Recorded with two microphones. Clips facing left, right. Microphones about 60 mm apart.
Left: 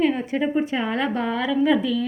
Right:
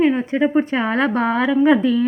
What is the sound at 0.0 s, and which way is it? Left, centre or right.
A woman's voice, right.